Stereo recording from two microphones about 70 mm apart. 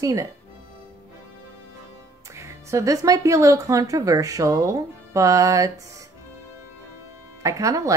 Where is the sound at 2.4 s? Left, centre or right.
Right.